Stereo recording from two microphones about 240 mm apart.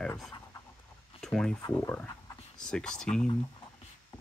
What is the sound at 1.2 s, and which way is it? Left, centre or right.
Speech, centre.